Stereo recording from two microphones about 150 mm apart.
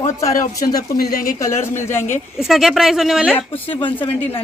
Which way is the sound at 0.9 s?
80° left.